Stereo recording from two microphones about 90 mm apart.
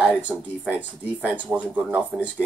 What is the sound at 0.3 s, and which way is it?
Speech, 15° right (ahead or behind).